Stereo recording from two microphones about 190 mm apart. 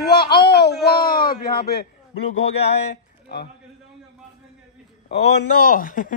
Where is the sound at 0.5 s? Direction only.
55° left (ahead or behind).